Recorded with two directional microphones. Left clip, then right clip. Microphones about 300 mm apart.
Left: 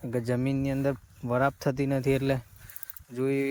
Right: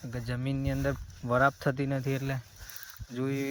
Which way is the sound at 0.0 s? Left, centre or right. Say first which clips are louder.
Left 8 dB; centre.